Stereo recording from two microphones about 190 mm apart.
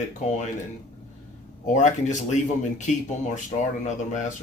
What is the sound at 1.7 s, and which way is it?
Speech, 40° left (ahead or behind).